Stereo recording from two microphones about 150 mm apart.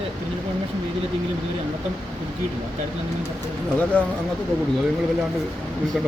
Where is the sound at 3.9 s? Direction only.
10° left (ahead or behind).